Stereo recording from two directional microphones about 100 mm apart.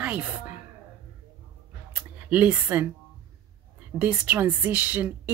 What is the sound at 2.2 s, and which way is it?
Speech, 15° right (ahead or behind).